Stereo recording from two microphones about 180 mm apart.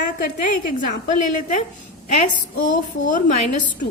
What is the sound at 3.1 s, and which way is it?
Speech, 45° left (ahead or behind).